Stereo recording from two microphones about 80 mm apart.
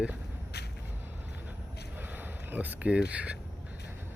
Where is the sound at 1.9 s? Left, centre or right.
Right.